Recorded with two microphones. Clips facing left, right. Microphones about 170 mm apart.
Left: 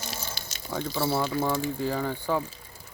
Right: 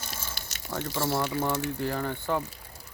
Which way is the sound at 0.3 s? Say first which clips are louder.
Left 2 dB; 65° right (ahead or behind).